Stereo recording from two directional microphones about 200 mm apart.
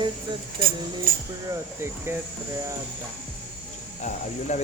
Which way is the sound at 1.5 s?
10° right (ahead or behind).